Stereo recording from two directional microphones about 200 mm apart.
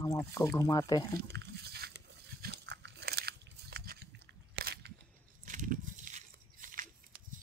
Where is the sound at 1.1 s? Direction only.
60° right (ahead or behind).